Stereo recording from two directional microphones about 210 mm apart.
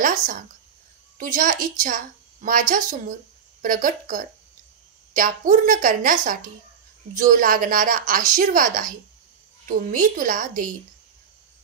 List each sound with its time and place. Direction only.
0.0 s a woman's voice: 40° right (ahead or behind)